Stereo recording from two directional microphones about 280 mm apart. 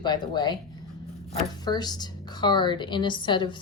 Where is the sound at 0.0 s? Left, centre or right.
Centre.